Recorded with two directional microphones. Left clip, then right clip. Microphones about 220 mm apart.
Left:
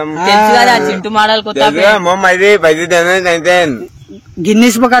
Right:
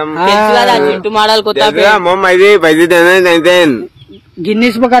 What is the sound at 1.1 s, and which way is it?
Speech, 30° right (ahead or behind).